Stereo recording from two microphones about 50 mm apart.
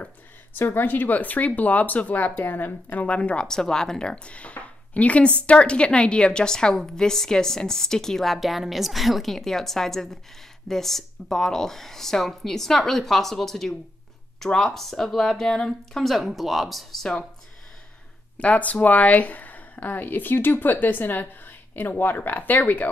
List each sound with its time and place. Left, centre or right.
0.6 s speech: left
3.4 s speech: centre
18.4 s speech: left